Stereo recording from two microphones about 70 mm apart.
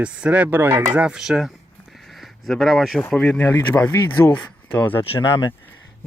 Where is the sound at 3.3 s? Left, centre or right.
Left.